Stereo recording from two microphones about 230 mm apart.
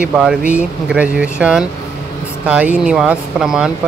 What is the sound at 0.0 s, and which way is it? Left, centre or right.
Speech, centre.